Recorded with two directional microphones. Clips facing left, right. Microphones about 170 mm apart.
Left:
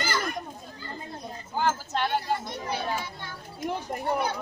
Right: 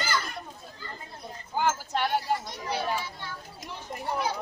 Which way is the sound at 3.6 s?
55° left (ahead or behind).